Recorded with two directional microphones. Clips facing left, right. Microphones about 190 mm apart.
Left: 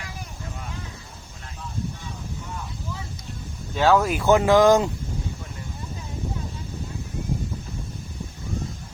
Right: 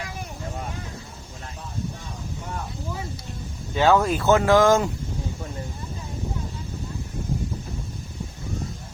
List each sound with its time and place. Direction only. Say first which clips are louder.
3.8 s speech: even; centre (ahead or behind); by 4.9 s 20° left (ahead or behind)